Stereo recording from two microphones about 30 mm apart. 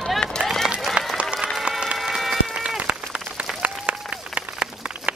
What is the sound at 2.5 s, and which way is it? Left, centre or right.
Run, right.